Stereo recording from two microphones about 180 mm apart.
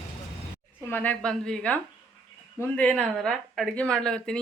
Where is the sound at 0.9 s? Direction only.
10° left (ahead or behind).